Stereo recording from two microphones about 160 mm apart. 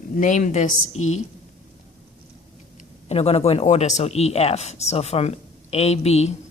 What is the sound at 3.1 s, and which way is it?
A woman's voice, 40° left (ahead or behind).